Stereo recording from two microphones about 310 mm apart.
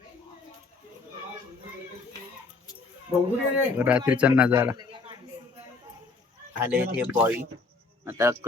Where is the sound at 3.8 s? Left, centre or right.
Centre.